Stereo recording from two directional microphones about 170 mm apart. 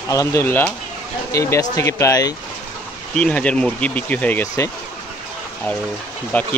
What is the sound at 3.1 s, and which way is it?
Speech, 5° left (ahead or behind).